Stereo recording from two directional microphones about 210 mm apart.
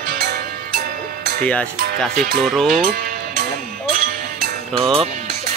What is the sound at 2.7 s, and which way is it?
Music, 40° right (ahead or behind).